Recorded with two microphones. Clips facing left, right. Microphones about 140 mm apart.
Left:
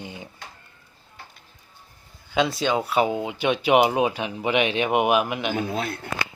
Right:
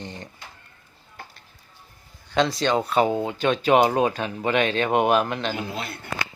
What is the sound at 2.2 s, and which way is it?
Speech, 5° left (ahead or behind).